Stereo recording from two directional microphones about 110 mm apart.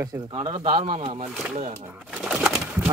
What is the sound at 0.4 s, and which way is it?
Speech, 70° right (ahead or behind).